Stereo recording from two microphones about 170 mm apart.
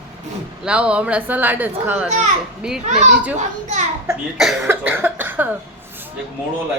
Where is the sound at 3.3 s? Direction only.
45° right (ahead or behind).